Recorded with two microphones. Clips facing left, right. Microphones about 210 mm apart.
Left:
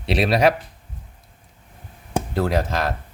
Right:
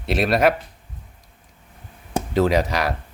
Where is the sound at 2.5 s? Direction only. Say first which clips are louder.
Right 2 dB; 15° right (ahead or behind).